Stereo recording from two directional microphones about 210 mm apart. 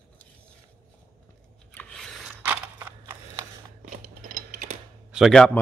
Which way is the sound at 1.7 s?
5° left (ahead or behind).